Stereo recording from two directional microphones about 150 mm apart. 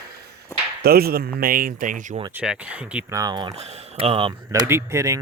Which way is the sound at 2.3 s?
10° right (ahead or behind).